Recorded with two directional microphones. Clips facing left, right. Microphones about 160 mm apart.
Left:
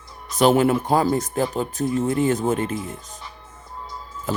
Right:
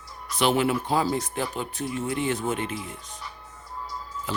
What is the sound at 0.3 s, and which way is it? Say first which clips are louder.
Speech: left 6 dB; 45° left (ahead or behind).